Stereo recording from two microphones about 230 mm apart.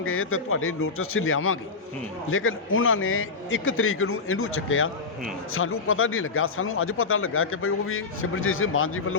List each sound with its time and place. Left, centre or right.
0.0 s a man's voice: left